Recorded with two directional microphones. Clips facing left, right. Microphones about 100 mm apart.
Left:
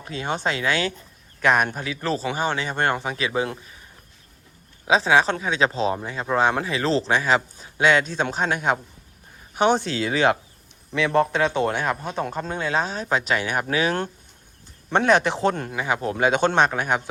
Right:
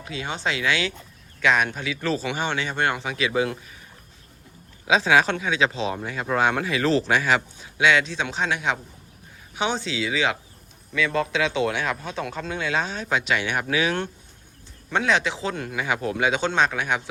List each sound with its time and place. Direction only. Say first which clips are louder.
0.1 s speech: left 3 dB; 45° left (ahead or behind)
4.9 s speech: left 1 dB; 30° left (ahead or behind)
14.9 s speech: left 4 dB; 50° left (ahead or behind)
15.5 s speech: left 1 dB; 35° left (ahead or behind)